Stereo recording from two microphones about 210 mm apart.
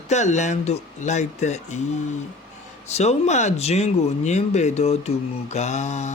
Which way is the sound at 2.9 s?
30° left (ahead or behind).